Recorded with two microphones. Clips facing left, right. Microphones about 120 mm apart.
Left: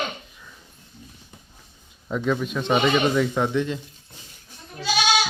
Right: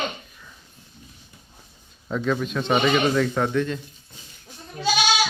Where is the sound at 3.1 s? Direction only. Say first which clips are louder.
Even; 15° left (ahead or behind).